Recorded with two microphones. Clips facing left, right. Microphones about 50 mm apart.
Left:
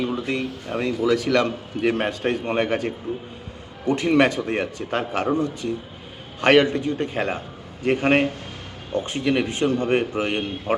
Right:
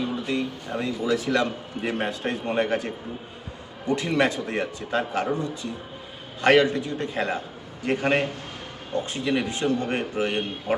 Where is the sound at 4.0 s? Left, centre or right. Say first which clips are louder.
Left 6 dB; left.